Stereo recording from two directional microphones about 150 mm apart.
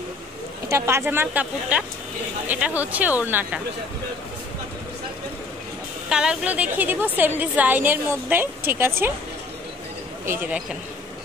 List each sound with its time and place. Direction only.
0.7 s a woman's voice: 15° right (ahead or behind)
6.0 s a woman's voice: 5° right (ahead or behind)
10.2 s a woman's voice: 15° right (ahead or behind)